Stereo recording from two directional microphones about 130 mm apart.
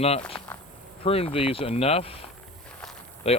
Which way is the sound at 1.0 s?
50° left (ahead or behind).